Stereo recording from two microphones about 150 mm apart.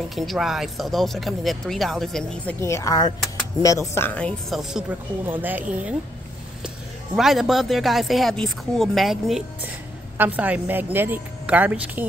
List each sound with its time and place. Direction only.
0.1 s speech: centre (ahead or behind)
2.6 s speech: 20° left (ahead or behind); by 4.8 s centre (ahead or behind)
5.2 s a woman's voice: 10° right (ahead or behind)
7.2 s speech: centre (ahead or behind)
10.1 s a woman's voice: 10° right (ahead or behind)